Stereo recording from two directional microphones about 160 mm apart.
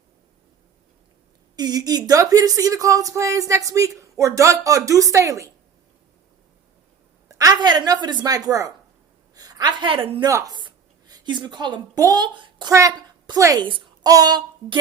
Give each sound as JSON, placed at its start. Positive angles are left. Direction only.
{"t": 1.5, "sound": "a woman's voice", "side_deg": -25}
{"t": 7.3, "sound": "a woman's voice", "side_deg": -20}
{"t": 10.2, "sound": "a woman's voice", "side_deg": -20}